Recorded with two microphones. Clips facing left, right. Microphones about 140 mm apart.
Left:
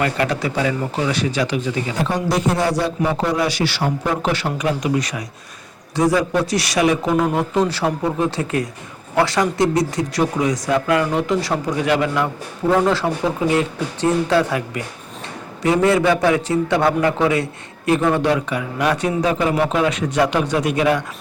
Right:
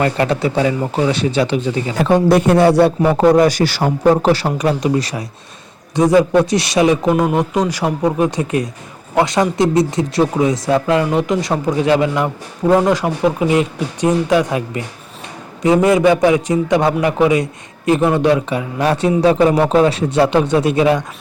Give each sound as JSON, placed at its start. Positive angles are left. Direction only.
{"t": 0.0, "sound": "a man's voice", "side_deg": -30}
{"t": 2.0, "sound": "a man's voice", "side_deg": -60}
{"t": 6.0, "sound": "a man's voice", "side_deg": -20}
{"t": 15.6, "sound": "a man's voice", "side_deg": -20}